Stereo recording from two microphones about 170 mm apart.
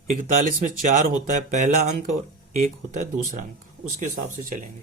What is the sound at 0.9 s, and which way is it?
Speech, 45° right (ahead or behind).